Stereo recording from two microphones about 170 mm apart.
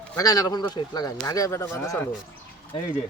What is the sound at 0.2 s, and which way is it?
Speech, 20° left (ahead or behind).